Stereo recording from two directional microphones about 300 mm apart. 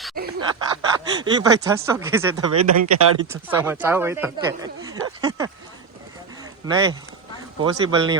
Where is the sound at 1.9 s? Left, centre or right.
Centre.